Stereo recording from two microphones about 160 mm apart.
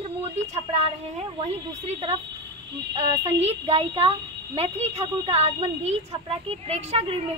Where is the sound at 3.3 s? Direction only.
40° right (ahead or behind).